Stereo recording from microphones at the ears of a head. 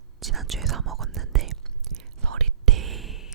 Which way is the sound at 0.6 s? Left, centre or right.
Right.